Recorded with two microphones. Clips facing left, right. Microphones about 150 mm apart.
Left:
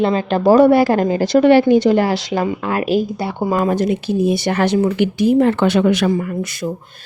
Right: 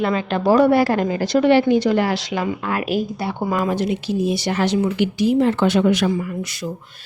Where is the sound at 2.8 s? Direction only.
25° left (ahead or behind).